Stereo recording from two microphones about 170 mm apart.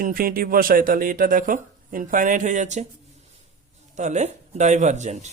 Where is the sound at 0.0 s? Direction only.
55° right (ahead or behind).